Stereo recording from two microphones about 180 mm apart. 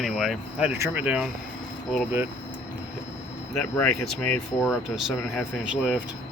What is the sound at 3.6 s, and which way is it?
Speech, 5° left (ahead or behind).